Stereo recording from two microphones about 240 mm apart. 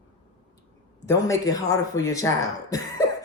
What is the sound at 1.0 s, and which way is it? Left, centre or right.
Speech, centre.